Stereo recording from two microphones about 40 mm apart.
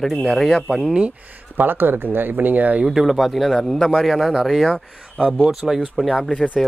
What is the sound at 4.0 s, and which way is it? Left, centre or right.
Speech, centre.